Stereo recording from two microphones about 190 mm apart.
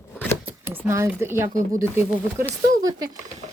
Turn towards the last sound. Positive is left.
turn(degrees=-20)  # may be behind; listen again after turning